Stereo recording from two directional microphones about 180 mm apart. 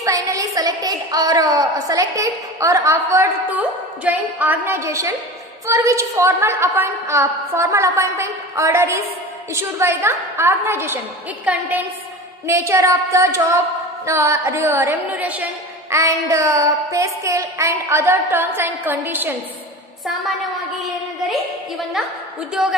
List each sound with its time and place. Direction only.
0.0 s a woman's voice: 20° right (ahead or behind)
20.8 s a woman's voice: centre (ahead or behind)